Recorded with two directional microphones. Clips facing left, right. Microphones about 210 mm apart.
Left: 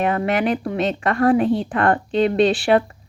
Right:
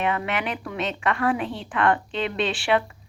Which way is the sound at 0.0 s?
40° left (ahead or behind).